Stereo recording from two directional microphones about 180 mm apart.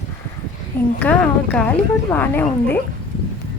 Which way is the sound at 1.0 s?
5° left (ahead or behind).